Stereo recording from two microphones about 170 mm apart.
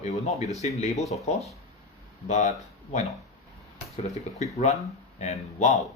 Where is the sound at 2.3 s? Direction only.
45° left (ahead or behind).